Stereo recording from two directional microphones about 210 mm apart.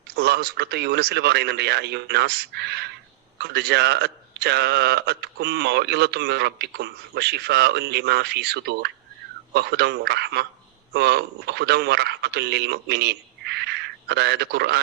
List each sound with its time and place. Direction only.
0.2 s a man's voice: 50° right (ahead or behind)